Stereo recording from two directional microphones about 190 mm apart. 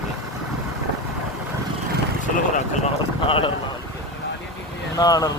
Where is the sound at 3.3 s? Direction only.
30° left (ahead or behind).